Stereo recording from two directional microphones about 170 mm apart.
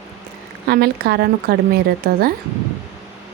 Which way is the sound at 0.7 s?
70° right (ahead or behind).